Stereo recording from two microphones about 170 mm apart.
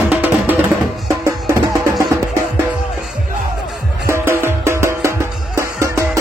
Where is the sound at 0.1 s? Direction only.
10° right (ahead or behind).